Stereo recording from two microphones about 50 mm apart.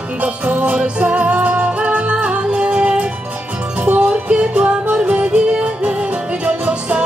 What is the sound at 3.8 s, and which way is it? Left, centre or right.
Music, right.